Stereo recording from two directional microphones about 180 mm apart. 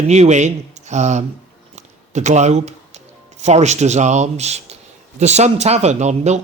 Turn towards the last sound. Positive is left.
turn(degrees=-40)  # may be behind; listen again after turning